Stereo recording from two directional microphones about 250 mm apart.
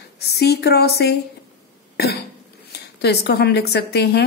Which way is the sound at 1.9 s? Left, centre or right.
Left.